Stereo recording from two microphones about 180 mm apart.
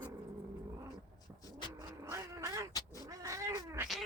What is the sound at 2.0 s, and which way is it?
Cat, 15° right (ahead or behind).